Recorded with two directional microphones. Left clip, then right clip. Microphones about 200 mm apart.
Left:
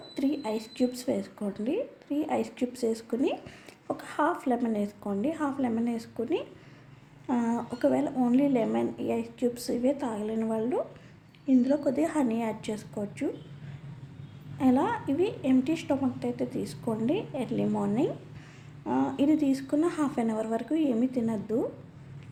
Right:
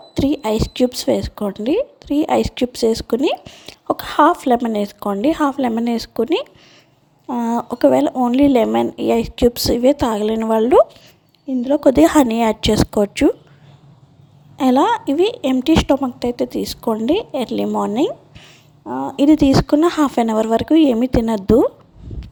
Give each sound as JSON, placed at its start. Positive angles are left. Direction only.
{"t": 0.1, "sound": "speech", "side_deg": -45}
{"t": 11.4, "sound": "speech", "side_deg": -35}
{"t": 14.6, "sound": "speech", "side_deg": -45}